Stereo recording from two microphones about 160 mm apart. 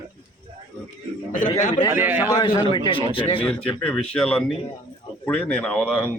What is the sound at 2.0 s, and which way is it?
Speech, 10° right (ahead or behind).